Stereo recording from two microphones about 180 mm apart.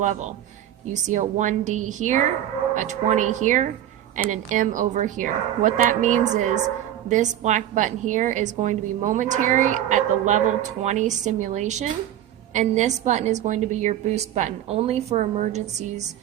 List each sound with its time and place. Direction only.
0.0 s a woman's voice: 40° right (ahead or behind)